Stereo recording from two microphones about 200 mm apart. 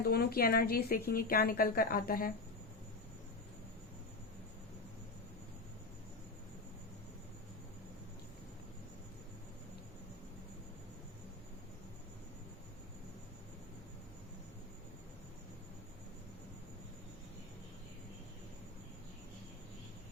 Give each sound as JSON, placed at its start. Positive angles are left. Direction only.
{"t": 0.0, "sound": "a woman's voice", "side_deg": 50}